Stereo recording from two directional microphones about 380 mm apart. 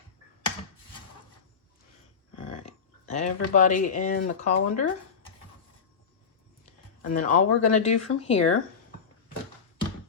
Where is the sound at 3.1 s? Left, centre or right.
Centre.